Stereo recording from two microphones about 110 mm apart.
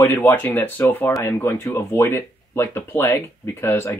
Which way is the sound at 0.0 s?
20° left (ahead or behind).